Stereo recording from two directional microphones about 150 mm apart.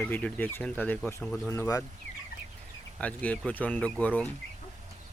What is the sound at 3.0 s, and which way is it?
Speech, 10° left (ahead or behind).